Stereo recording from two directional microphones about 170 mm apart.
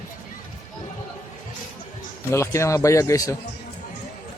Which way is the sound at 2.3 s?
15° left (ahead or behind).